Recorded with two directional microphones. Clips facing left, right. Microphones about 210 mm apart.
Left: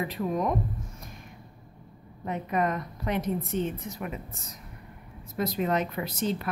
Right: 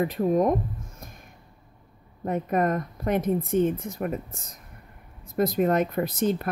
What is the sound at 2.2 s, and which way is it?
A woman's voice, 50° right (ahead or behind).